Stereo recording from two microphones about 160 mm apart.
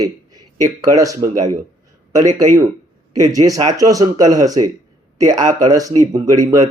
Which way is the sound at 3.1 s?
20° right (ahead or behind).